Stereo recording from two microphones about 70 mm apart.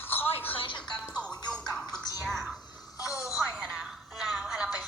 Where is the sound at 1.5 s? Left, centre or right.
Centre.